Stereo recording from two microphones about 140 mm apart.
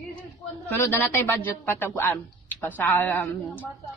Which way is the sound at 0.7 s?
15° left (ahead or behind).